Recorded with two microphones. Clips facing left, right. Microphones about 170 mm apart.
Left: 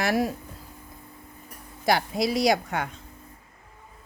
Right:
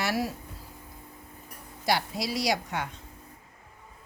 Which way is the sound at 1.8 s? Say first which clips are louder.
Left 5 dB; 50° left (ahead or behind).